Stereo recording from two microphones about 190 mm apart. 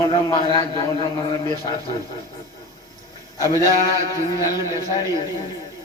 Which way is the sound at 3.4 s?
20° left (ahead or behind).